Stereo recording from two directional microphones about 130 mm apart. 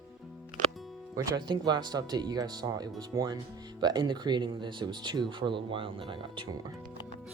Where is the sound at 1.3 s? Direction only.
30° right (ahead or behind).